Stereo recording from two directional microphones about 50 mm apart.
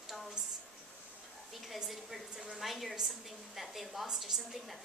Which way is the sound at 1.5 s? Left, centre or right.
Centre.